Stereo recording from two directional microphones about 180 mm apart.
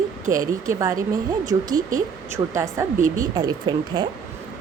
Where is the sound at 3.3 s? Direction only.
25° right (ahead or behind).